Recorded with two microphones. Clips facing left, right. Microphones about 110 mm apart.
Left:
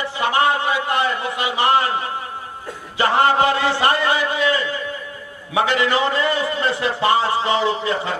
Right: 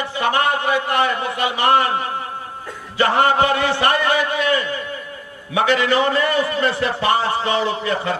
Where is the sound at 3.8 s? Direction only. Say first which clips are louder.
Even; 20° left (ahead or behind).